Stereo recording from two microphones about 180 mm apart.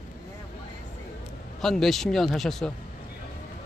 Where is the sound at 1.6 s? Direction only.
Centre (ahead or behind).